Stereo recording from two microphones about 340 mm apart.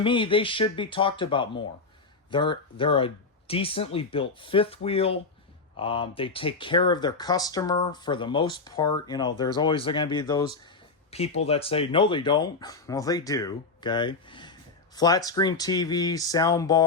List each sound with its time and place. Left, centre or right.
0.0 s speech: centre